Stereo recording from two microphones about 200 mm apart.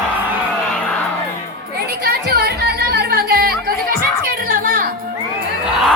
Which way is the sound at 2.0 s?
55° right (ahead or behind).